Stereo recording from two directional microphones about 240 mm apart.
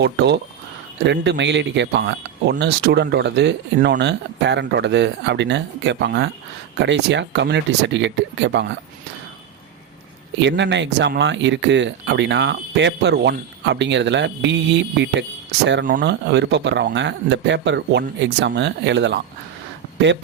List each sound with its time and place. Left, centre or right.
0.0 s speech: right
10.4 s speech: right